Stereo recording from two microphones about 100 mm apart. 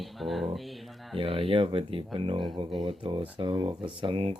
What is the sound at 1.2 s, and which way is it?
Speech, 65° right (ahead or behind).